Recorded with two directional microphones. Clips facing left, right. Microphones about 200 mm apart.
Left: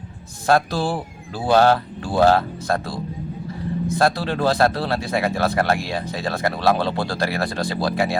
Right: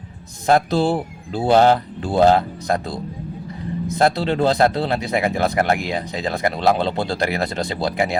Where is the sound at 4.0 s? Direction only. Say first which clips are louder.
Right 3 dB; 20° right (ahead or behind).